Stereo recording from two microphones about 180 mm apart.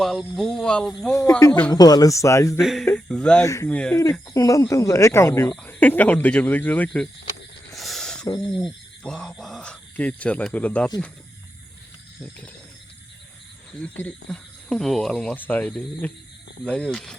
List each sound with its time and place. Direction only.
0.0 s speech: centre (ahead or behind)
1.1 s speech: 15° left (ahead or behind)
2.6 s speech: centre (ahead or behind)
3.4 s speech: 15° left (ahead or behind)
3.7 s speech: 5° left (ahead or behind)
3.9 s speech: 20° left (ahead or behind)
7.8 s a sound: centre (ahead or behind)
8.5 s speech: 5° left (ahead or behind)
13.7 s speech: 10° left (ahead or behind)